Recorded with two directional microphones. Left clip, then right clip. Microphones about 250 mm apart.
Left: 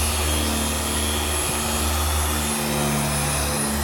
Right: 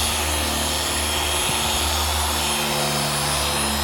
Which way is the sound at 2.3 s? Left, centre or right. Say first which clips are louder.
Right 3 dB; centre.